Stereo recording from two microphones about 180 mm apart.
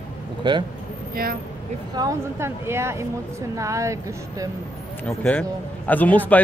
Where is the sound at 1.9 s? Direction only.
20° right (ahead or behind).